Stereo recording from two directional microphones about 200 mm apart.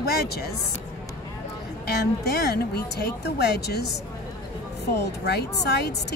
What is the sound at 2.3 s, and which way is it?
Speech, 55° left (ahead or behind).